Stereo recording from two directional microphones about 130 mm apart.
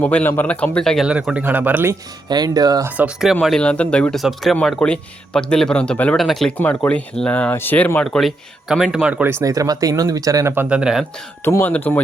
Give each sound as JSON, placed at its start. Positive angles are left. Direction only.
{"t": 0.0, "sound": "speech", "side_deg": 10}
{"t": 1.0, "sound": "speech", "side_deg": -5}
{"t": 2.3, "sound": "speech", "side_deg": -30}
{"t": 3.4, "sound": "speech", "side_deg": 5}
{"t": 6.6, "sound": "speech", "side_deg": 10}
{"t": 9.2, "sound": "speech", "side_deg": -20}
{"t": 11.4, "sound": "speech", "side_deg": 15}